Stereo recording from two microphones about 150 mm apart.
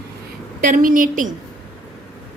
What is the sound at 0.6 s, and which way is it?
Speech, 65° right (ahead or behind).